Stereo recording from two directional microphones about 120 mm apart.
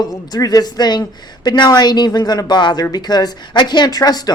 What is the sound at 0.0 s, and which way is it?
Speech, 35° left (ahead or behind).